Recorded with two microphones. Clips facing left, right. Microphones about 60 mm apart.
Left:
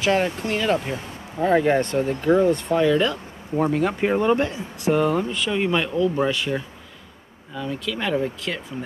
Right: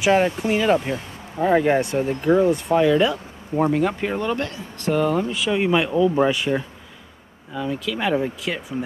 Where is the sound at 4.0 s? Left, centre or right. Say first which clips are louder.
Left 4 dB; centre.